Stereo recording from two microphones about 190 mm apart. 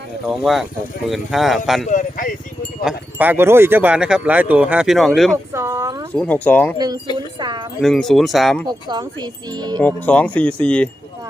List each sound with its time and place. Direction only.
0.3 s speech: centre (ahead or behind)
1.9 s a sound: 45° left (ahead or behind)
2.8 s speech: 10° right (ahead or behind)
5.5 s a sound: 15° right (ahead or behind)
6.1 s speech: 5° left (ahead or behind)
7.3 s wind chime: 25° right (ahead or behind)
7.8 s speech: centre (ahead or behind)
8.6 s speech: 20° right (ahead or behind)
9.8 s speech: 5° left (ahead or behind)